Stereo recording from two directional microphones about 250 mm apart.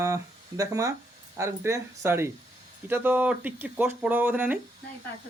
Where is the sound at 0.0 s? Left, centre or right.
Centre.